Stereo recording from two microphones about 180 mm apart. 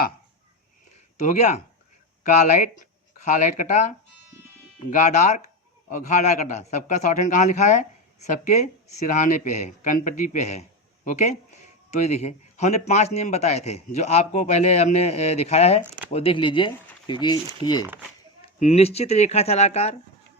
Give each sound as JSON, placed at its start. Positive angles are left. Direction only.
{"t": 1.2, "sound": "speech", "side_deg": 40}
{"t": 4.9, "sound": "speech", "side_deg": 45}
{"t": 18.6, "sound": "speech", "side_deg": 35}